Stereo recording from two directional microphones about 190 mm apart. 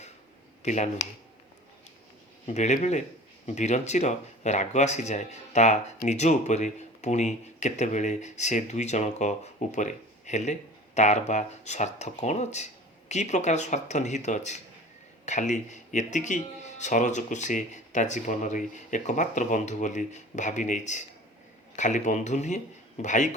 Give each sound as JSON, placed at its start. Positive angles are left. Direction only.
{"t": 0.6, "sound": "speech", "side_deg": 40}
{"t": 2.5, "sound": "speech", "side_deg": 35}